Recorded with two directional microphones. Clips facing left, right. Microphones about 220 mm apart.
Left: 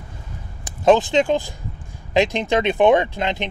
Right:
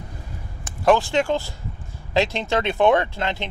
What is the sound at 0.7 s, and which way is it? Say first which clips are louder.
Speech: left 3 dB; 20° left (ahead or behind).